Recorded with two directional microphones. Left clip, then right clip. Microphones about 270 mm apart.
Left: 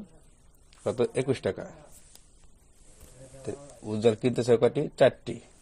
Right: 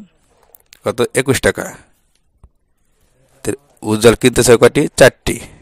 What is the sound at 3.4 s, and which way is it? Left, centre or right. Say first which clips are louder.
A man's voice: right 16 dB; right.